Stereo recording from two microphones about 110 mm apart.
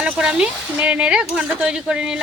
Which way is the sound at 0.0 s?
10° right (ahead or behind).